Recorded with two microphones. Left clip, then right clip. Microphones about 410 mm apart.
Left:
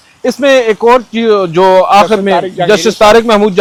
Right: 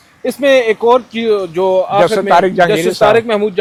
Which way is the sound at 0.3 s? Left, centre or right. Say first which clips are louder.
Left 3 dB; left.